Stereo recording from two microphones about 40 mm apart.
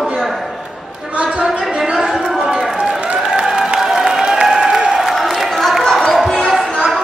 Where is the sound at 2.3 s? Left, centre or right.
Centre.